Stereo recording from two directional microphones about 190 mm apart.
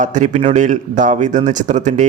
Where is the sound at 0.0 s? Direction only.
40° right (ahead or behind).